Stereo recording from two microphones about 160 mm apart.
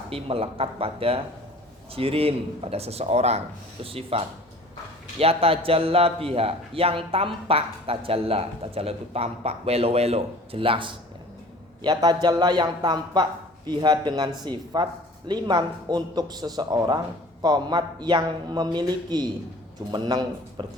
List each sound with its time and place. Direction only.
0.1 s a man's voice: 35° right (ahead or behind)